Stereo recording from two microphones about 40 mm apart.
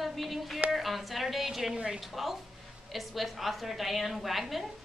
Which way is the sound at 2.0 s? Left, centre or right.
Centre.